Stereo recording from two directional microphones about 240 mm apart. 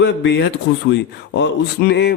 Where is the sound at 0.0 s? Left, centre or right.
Left.